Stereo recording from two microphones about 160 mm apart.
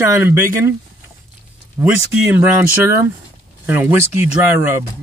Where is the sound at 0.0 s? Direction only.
15° right (ahead or behind).